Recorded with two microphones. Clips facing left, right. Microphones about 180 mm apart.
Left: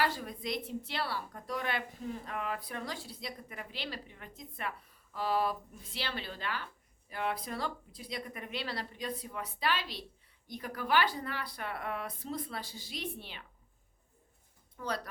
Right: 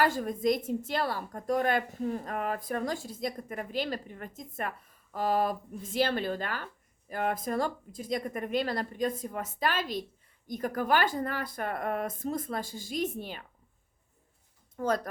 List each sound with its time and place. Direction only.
0.0 s a woman's voice: 45° right (ahead or behind)
14.8 s a woman's voice: 45° right (ahead or behind)